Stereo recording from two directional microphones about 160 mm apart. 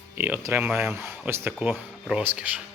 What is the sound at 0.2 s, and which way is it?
Speech, 15° right (ahead or behind).